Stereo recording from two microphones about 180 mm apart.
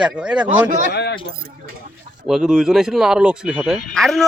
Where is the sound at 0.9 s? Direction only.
65° left (ahead or behind).